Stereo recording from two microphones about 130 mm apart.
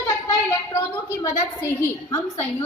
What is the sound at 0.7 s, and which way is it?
A woman's voice, 30° left (ahead or behind).